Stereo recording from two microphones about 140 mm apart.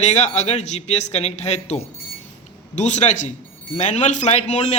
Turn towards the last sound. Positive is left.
turn(degrees=55)  # may be behind; listen again after turning